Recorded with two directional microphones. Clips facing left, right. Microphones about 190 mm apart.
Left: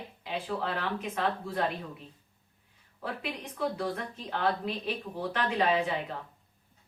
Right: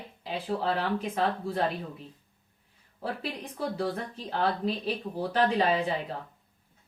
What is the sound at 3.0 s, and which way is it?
Speech, 30° right (ahead or behind).